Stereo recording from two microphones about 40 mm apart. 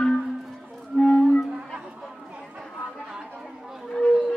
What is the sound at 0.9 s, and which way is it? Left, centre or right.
Music, left.